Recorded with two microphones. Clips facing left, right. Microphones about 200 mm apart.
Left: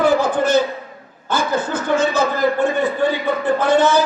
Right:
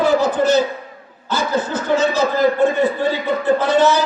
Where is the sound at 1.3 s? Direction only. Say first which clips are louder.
Even; 50° left (ahead or behind).